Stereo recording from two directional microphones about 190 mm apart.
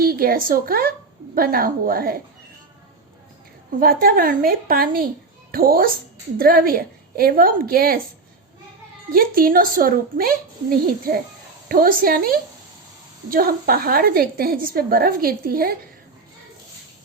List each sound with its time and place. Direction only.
0.0 s a woman's voice: 50° right (ahead or behind)
3.7 s a woman's voice: 50° right (ahead or behind)
9.1 s a woman's voice: 50° right (ahead or behind)